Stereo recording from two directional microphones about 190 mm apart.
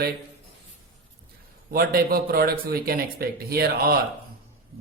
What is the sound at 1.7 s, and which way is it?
Speech, 50° right (ahead or behind).